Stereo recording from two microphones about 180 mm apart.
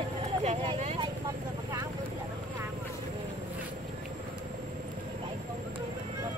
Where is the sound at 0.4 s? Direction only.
40° right (ahead or behind).